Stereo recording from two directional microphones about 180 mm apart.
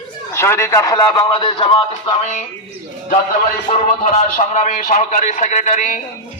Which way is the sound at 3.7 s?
45° left (ahead or behind).